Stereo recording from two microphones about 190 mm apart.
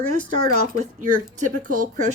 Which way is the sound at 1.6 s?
40° right (ahead or behind).